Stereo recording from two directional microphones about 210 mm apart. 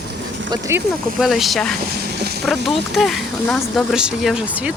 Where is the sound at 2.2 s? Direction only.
50° right (ahead or behind).